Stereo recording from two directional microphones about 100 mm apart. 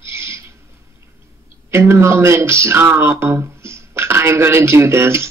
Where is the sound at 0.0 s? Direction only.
25° right (ahead or behind).